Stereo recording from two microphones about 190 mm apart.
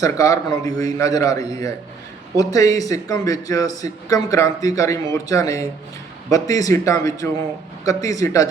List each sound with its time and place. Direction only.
0.0 s speech: 20° left (ahead or behind)
2.4 s a man's voice: 20° left (ahead or behind)